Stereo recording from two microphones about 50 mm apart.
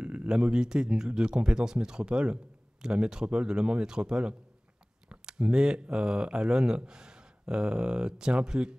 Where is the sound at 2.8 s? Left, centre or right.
Centre.